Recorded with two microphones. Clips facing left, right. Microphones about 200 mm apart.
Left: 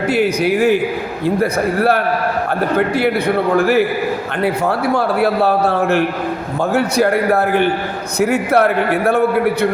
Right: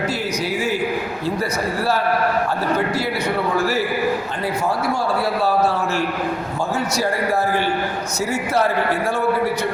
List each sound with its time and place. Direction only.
0.1 s a man's voice: 60° left (ahead or behind)